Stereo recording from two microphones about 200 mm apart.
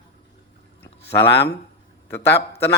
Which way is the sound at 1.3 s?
55° left (ahead or behind).